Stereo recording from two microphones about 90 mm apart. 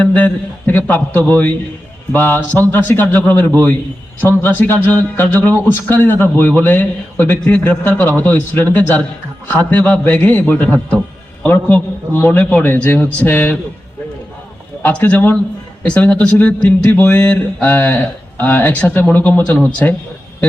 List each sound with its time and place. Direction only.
0.0 s a man's voice: 15° left (ahead or behind)
14.8 s a man's voice: 20° left (ahead or behind)